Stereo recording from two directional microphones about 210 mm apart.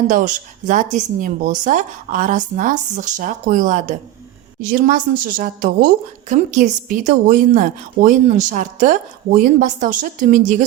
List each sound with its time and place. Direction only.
0.1 s a woman's voice: 40° right (ahead or behind)